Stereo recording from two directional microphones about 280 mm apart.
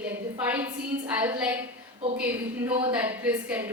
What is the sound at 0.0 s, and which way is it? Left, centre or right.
A woman's voice, centre.